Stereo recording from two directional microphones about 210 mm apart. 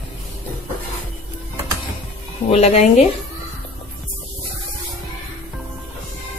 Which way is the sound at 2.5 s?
30° left (ahead or behind).